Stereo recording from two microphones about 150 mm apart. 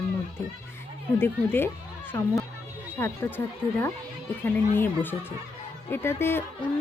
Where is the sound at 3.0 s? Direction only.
15° left (ahead or behind).